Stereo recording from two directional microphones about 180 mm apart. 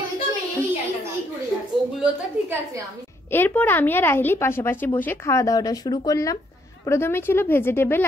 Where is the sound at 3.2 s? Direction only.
10° left (ahead or behind).